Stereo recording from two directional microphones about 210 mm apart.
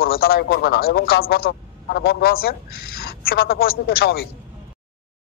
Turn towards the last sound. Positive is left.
turn(degrees=45)  # may be behind; listen again after turning